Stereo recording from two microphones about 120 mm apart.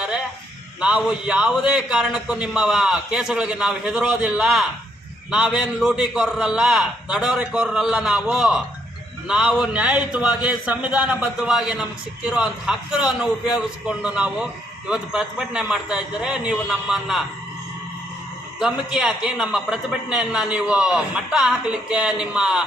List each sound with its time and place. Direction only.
0.8 s speech: 5° right (ahead or behind)
18.6 s speech: 5° right (ahead or behind)